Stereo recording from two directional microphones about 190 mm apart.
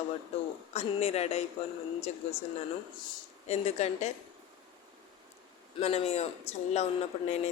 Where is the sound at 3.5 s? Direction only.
35° left (ahead or behind).